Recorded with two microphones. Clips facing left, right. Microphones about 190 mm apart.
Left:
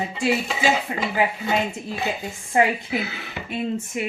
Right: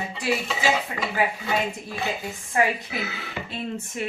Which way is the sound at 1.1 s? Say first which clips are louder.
Left 2 dB; 20° left (ahead or behind).